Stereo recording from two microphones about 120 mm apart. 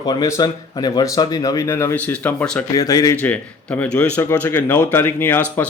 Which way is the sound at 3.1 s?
15° left (ahead or behind).